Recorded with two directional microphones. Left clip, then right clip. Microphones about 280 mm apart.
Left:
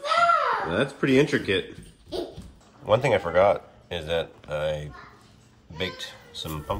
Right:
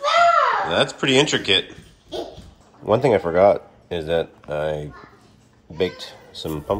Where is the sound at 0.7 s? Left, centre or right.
Centre.